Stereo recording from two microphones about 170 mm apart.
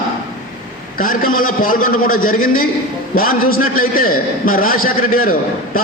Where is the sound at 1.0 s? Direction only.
55° left (ahead or behind).